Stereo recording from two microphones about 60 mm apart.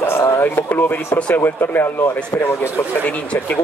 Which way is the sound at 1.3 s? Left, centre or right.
Left.